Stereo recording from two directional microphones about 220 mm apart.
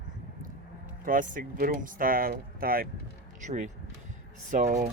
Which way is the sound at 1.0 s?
40° right (ahead or behind).